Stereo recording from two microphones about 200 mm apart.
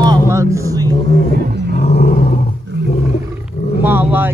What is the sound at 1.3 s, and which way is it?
Roaring cats, 55° right (ahead or behind).